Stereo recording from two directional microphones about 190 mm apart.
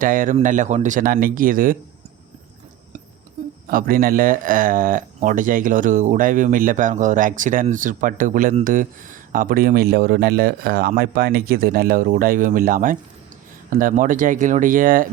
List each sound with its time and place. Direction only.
0.0 s speech: 45° right (ahead or behind)
3.7 s speech: 45° right (ahead or behind)